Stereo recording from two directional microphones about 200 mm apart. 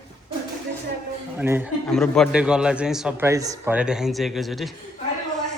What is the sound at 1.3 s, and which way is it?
Speech, 10° right (ahead or behind).